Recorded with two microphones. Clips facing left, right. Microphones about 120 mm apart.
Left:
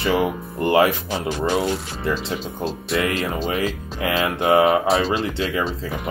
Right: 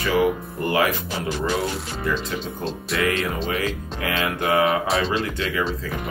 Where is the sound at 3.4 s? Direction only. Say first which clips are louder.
Left 2 dB; 35° left (ahead or behind).